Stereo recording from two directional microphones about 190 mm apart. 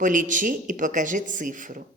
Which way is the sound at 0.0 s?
45° right (ahead or behind).